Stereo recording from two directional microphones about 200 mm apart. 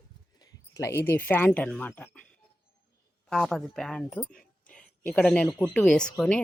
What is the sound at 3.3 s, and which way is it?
Speech, centre (ahead or behind).